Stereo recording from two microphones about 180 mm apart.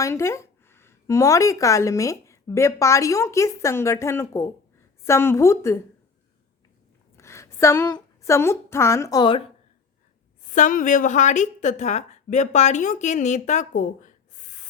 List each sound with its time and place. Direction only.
0.0 s a woman's voice: 15° left (ahead or behind)
7.2 s a woman's voice: 15° left (ahead or behind)
10.4 s a woman's voice: 45° left (ahead or behind)